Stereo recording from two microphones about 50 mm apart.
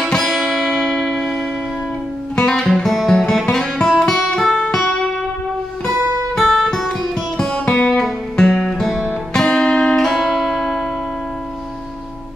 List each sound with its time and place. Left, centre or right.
0.1 s music: centre
2.3 s music: centre
2.6 s music: centre
4.0 s guitar: centre
4.6 s music: centre
6.3 s music: centre
7.3 s music: centre
9.9 s music: centre